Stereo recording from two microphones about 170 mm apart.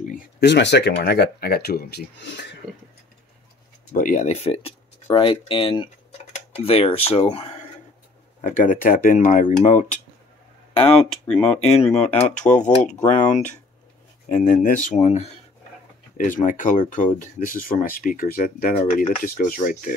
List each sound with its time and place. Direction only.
0.0 s a sound: 50° left (ahead or behind)
0.4 s speech: 85° left
3.9 s speech: 50° left (ahead or behind)
8.4 s speech: 50° left (ahead or behind)
10.8 s speech: 5° left (ahead or behind)
12.4 s speech: 45° left (ahead or behind)
16.3 s speech: 50° left (ahead or behind)